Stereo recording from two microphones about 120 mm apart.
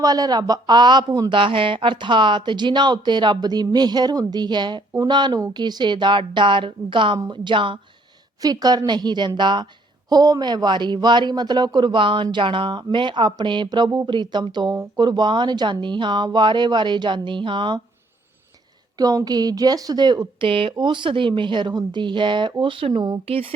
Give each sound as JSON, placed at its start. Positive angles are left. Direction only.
{"t": 0.0, "sound": "a woman's voice", "side_deg": -30}
{"t": 8.4, "sound": "speech", "side_deg": -30}
{"t": 18.9, "sound": "speech", "side_deg": -30}
{"t": 23.2, "sound": "a woman's voice", "side_deg": -50}